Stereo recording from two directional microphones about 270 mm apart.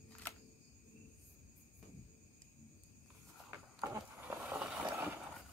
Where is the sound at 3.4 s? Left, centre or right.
Centre.